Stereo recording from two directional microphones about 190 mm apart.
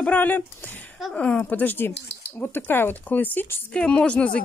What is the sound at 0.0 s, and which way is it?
Speech, 10° left (ahead or behind).